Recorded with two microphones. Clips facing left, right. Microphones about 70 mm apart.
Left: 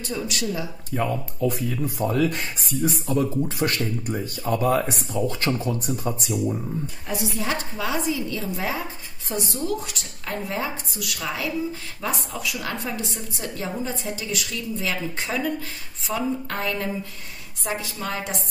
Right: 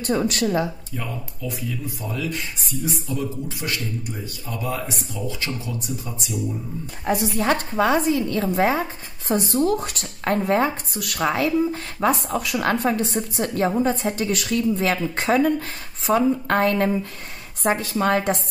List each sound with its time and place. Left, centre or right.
0.0 s speech: right
0.9 s speech: left
7.1 s speech: right